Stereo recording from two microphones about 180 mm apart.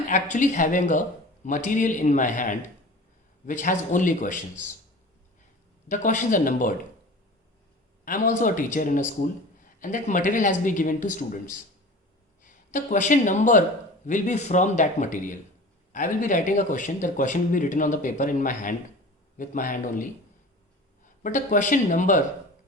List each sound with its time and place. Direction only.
0.1 s speech: 45° left (ahead or behind)
5.9 s speech: 45° left (ahead or behind)
8.0 s speech: 45° left (ahead or behind)